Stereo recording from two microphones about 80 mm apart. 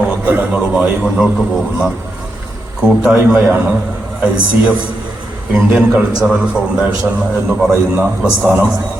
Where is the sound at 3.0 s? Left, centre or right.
Centre.